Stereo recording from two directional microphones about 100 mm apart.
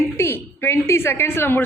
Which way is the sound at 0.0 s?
25° left (ahead or behind).